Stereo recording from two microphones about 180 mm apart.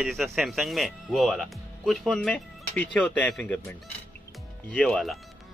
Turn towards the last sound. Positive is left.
turn(degrees=0)  # may be behind; listen again after turning